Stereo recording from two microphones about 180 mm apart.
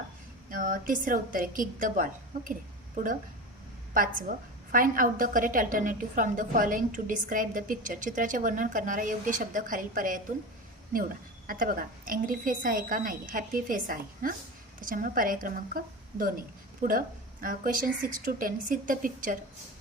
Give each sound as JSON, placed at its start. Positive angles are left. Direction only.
{"t": 0.5, "sound": "a woman's voice", "side_deg": -50}
{"t": 4.7, "sound": "a woman's voice", "side_deg": -50}
{"t": 11.4, "sound": "a woman's voice", "side_deg": -50}